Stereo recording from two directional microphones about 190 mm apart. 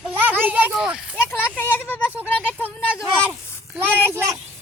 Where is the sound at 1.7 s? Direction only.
10° left (ahead or behind).